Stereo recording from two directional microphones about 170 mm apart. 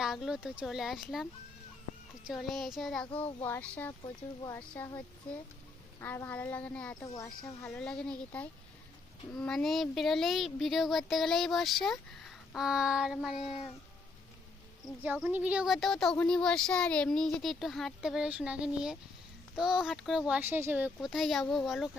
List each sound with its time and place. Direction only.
0.0 s speech: centre (ahead or behind)
3.1 s speech: 30° left (ahead or behind)
3.4 s a woman's voice: 10° left (ahead or behind)
15.0 s speech: 10° right (ahead or behind)